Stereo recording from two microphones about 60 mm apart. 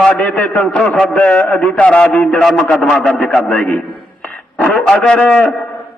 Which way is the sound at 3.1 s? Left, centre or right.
Left.